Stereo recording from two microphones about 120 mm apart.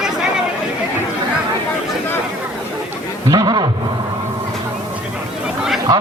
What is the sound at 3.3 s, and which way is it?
Speech, 35° right (ahead or behind).